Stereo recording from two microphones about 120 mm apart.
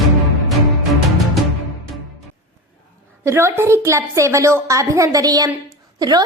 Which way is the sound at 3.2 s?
20° right (ahead or behind).